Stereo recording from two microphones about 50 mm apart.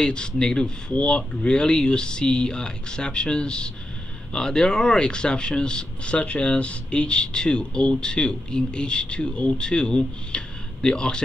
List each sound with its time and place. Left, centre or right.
0.0 s speech: centre